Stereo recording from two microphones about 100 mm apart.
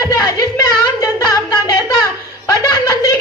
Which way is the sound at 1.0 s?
35° left (ahead or behind).